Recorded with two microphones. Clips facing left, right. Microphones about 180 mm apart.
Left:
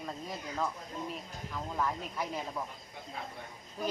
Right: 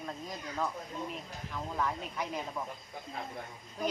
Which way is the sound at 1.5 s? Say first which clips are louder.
Even; 5° left (ahead or behind).